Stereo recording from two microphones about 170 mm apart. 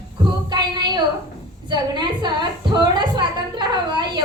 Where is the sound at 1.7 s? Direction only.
25° right (ahead or behind).